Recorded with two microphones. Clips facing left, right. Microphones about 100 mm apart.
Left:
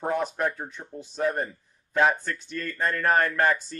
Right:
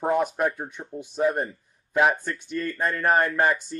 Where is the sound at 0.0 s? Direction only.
15° right (ahead or behind).